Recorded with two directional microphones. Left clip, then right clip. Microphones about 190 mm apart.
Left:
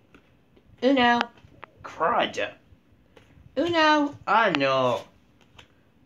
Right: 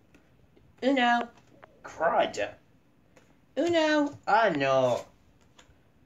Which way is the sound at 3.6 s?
35° left (ahead or behind).